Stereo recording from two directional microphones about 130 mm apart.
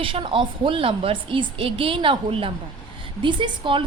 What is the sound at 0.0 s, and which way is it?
A woman's voice, 45° right (ahead or behind).